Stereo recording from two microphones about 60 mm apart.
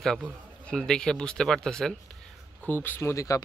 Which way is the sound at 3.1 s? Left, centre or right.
Left.